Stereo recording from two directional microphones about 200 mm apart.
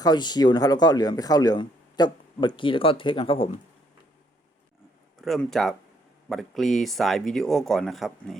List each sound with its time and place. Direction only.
0.0 s speech: 20° left (ahead or behind)
5.2 s speech: centre (ahead or behind)